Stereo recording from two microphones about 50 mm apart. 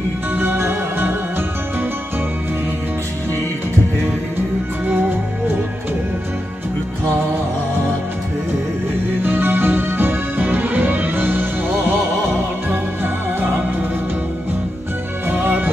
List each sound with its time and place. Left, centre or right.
0.4 s music: right
9.2 s music: right
12.6 s music: right
15.2 s music: right